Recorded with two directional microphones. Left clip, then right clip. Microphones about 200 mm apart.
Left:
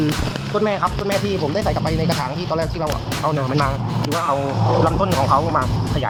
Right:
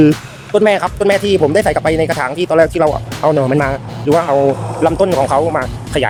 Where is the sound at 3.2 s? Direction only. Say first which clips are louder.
Right 8 dB; 30° right (ahead or behind).